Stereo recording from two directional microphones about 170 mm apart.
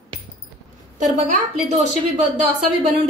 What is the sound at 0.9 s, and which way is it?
A woman's voice, 45° right (ahead or behind).